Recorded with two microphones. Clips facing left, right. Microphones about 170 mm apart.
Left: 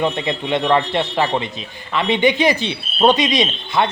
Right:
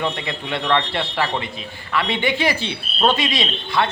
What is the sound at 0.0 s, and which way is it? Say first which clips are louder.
Speech: left 5 dB; 20° left (ahead or behind).